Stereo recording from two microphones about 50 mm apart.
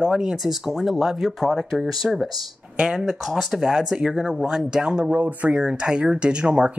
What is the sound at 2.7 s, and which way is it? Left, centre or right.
Speech, centre.